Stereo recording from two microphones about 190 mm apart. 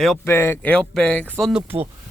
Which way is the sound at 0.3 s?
15° left (ahead or behind).